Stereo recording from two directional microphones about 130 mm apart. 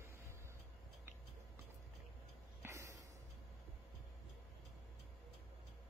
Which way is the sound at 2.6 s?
25° right (ahead or behind).